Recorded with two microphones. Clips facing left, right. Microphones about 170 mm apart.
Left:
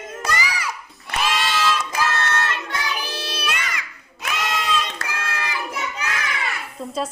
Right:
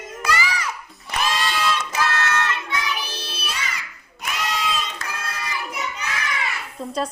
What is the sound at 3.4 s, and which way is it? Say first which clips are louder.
Music: left 1 dB; 70° left (ahead or behind).